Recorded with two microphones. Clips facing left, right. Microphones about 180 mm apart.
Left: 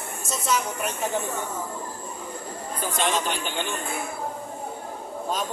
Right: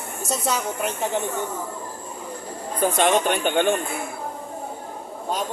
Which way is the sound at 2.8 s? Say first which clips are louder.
Right 7 dB; 60° right (ahead or behind).